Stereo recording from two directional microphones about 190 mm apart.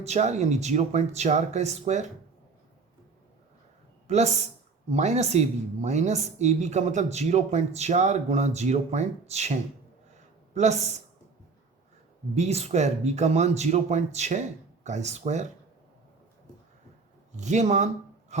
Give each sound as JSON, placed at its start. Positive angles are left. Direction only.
{"t": 0.0, "sound": "speech", "side_deg": -35}
{"t": 4.0, "sound": "speech", "side_deg": -35}
{"t": 12.3, "sound": "speech", "side_deg": -35}
{"t": 17.3, "sound": "speech", "side_deg": -40}